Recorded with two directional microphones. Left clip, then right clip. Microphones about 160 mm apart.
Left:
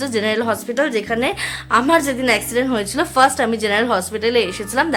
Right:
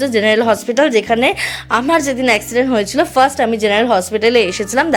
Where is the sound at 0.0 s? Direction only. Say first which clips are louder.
Right 7 dB; 25° right (ahead or behind).